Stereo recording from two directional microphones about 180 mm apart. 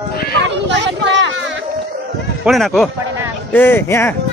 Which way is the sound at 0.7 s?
85° right.